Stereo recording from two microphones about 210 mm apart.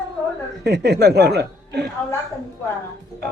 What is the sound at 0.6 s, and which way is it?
A man's voice, 50° right (ahead or behind).